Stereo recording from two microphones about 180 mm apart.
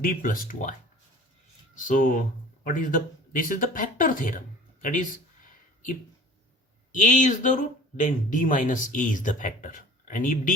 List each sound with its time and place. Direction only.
0.0 s speech: 50° left (ahead or behind)
6.9 s speech: 45° left (ahead or behind)